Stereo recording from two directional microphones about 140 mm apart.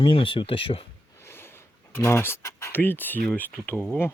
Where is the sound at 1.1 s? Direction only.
15° left (ahead or behind).